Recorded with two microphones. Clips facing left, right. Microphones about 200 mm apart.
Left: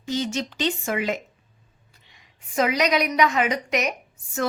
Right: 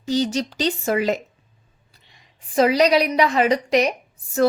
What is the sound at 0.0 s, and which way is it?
A woman's voice, 35° right (ahead or behind).